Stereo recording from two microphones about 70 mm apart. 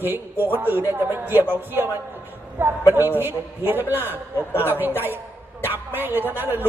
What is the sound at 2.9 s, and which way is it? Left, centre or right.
A man's voice, right.